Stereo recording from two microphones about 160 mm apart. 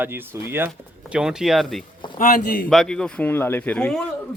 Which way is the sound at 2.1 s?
60° left (ahead or behind).